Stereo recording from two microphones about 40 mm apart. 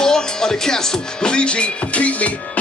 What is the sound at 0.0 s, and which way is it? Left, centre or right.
Music, centre.